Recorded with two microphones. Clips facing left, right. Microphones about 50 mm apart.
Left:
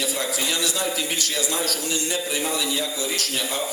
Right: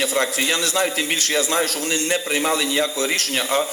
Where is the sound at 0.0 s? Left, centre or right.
Right.